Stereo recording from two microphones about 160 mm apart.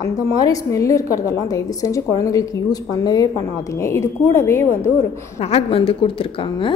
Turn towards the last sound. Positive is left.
turn(degrees=35)  # may be behind; listen again after turning